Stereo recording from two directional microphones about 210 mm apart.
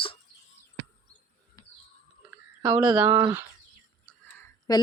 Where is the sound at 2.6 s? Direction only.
10° right (ahead or behind).